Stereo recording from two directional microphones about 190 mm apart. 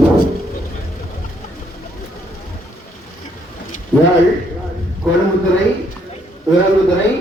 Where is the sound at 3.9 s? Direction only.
5° right (ahead or behind).